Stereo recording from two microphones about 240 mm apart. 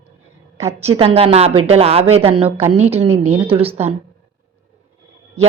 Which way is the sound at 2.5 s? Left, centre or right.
Centre.